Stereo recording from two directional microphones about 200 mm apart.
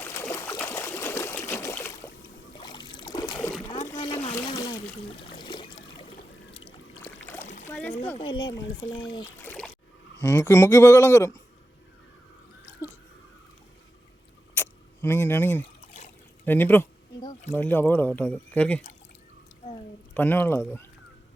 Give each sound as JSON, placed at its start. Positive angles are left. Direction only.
{"t": 0.0, "sound": "trickle", "side_deg": 15}
{"t": 4.0, "sound": "splash", "side_deg": 25}
{"t": 4.4, "sound": "trickle", "side_deg": 20}
{"t": 7.6, "sound": "splash", "side_deg": 10}
{"t": 8.1, "sound": "speech", "side_deg": 25}
{"t": 9.4, "sound": "a sound", "side_deg": 5}
{"t": 10.2, "sound": "speech", "side_deg": 15}
{"t": 14.5, "sound": "a sound", "side_deg": 10}
{"t": 16.5, "sound": "speech", "side_deg": 10}
{"t": 20.1, "sound": "speech", "side_deg": 10}